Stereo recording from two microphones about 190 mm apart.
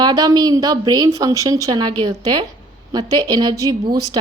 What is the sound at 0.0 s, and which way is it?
A woman's voice, 20° right (ahead or behind).